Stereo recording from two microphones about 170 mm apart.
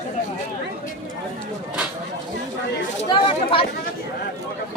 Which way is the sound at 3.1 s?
30° left (ahead or behind).